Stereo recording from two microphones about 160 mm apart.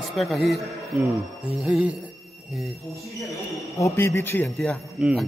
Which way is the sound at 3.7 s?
15° left (ahead or behind).